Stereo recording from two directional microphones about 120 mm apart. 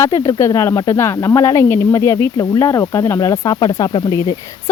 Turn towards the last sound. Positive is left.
turn(degrees=35)  # may be behind; listen again after turning